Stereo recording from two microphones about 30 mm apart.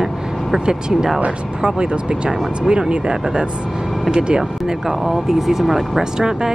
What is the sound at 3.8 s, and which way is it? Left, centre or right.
Vehicle, centre.